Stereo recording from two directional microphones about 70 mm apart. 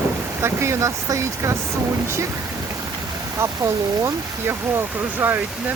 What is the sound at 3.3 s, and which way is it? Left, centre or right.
Speech, right.